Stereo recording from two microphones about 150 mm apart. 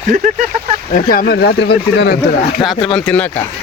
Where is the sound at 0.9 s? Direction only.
70° left (ahead or behind); by 2.2 s 90° left.